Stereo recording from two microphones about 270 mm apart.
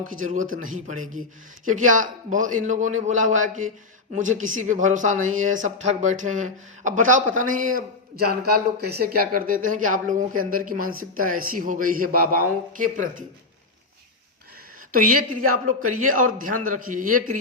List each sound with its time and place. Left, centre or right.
0.0 s speech: right
14.9 s speech: right